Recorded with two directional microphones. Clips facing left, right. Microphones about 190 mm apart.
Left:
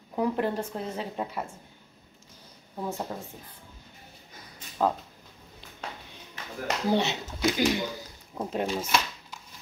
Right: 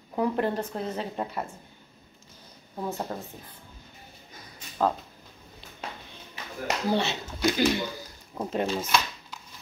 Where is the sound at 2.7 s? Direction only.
Centre (ahead or behind).